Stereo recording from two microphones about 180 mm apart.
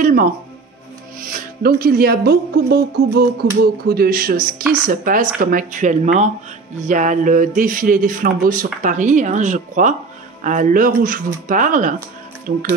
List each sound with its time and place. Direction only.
0.0 s music: 50° right (ahead or behind)
1.2 s speech: 55° right (ahead or behind)